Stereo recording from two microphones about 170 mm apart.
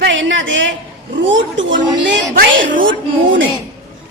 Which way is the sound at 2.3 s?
55° right (ahead or behind).